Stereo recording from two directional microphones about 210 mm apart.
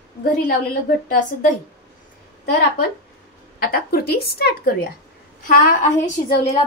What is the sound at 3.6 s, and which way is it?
A woman's voice, 50° left (ahead or behind).